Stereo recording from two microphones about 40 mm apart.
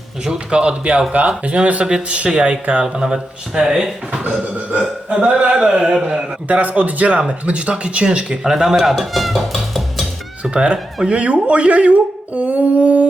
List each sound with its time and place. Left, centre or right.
0.3 s speech: right
3.0 s speech: centre
4.2 s a man's voice: right
4.8 s a sound: right
5.4 s speech: right
6.5 s a man's voice: right
8.4 s speech: centre
8.7 s a sound: centre
10.5 s speech: right